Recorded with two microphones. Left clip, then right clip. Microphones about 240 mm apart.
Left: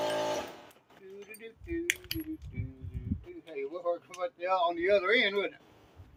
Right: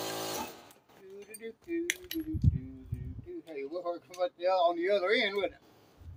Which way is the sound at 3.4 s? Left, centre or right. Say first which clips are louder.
Left 3 dB; centre.